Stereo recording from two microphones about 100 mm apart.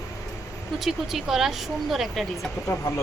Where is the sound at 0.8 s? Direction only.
5° right (ahead or behind).